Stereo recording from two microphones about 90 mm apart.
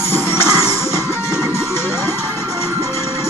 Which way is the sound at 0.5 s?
40° right (ahead or behind).